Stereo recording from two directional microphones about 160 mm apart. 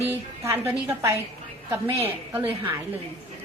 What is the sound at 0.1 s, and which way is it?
A woman's voice, 15° right (ahead or behind).